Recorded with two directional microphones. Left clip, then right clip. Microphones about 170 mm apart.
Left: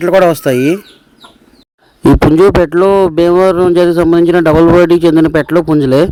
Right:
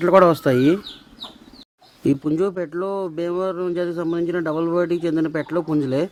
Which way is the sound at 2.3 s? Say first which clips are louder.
Left 15 dB; 55° left (ahead or behind).